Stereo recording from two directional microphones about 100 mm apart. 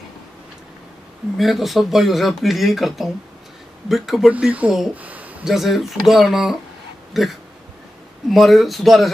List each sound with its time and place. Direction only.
1.4 s speech: centre (ahead or behind)
4.3 s speech: 15° right (ahead or behind)
4.9 s a sound: 15° right (ahead or behind)
5.4 s speech: 5° right (ahead or behind)